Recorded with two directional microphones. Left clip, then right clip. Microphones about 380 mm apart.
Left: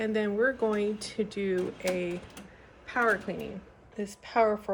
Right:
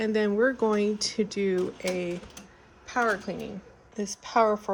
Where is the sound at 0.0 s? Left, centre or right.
Centre.